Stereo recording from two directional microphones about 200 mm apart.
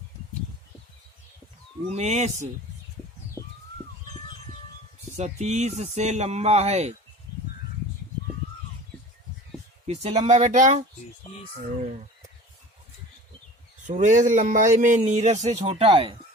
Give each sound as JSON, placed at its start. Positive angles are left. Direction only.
{"t": 2.0, "sound": "a man's voice", "side_deg": -35}
{"t": 5.1, "sound": "a man's voice", "side_deg": -35}
{"t": 9.8, "sound": "a man's voice", "side_deg": -30}
{"t": 13.8, "sound": "a man's voice", "side_deg": -40}